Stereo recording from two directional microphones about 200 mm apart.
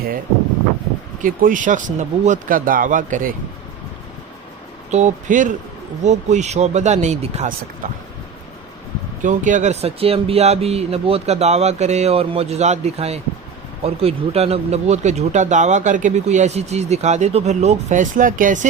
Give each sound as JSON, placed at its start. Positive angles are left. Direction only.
{"t": 1.2, "sound": "speech", "side_deg": -40}
{"t": 4.9, "sound": "speech", "side_deg": -35}
{"t": 9.2, "sound": "speech", "side_deg": -40}